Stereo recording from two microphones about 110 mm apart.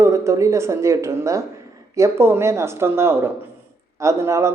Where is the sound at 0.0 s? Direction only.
25° right (ahead or behind).